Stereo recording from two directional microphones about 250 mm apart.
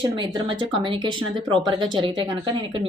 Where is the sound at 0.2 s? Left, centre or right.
Centre.